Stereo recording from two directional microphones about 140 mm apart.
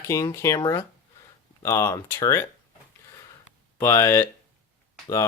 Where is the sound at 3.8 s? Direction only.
20° left (ahead or behind).